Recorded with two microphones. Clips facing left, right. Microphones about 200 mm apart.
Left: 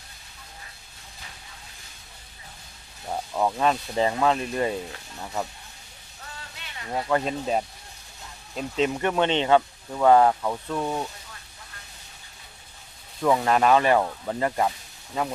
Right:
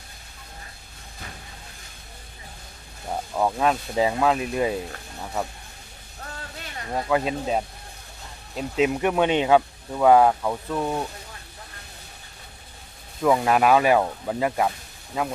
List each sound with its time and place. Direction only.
3.1 s speech: 5° right (ahead or behind)
6.3 s a sound: 45° right (ahead or behind)
7.1 s speech: 5° right (ahead or behind)
13.2 s speech: 5° right (ahead or behind)